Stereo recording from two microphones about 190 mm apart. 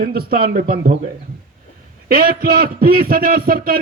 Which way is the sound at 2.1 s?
50° right (ahead or behind).